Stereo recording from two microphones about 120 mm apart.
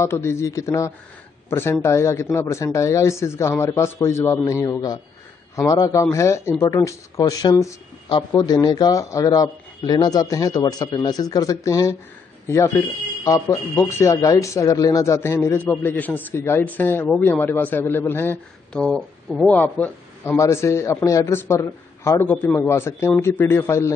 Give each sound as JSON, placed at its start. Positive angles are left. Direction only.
{"t": 0.0, "sound": "a man's voice", "side_deg": 20}
{"t": 18.7, "sound": "a man's voice", "side_deg": 5}